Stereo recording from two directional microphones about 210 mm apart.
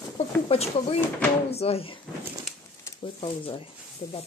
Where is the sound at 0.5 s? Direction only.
30° left (ahead or behind).